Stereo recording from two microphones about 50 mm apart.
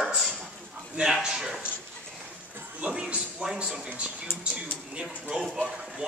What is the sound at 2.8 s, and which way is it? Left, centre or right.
Speech, right.